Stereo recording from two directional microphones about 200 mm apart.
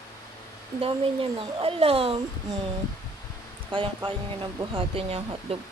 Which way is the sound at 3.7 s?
25° right (ahead or behind).